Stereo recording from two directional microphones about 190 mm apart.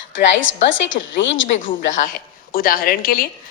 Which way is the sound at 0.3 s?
90° left.